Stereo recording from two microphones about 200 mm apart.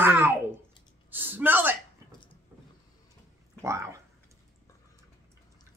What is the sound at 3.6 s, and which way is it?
Speech, 15° right (ahead or behind).